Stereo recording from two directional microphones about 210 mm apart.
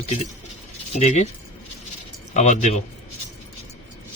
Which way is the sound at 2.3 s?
35° left (ahead or behind).